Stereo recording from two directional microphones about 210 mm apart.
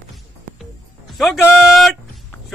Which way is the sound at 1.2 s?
Centre (ahead or behind).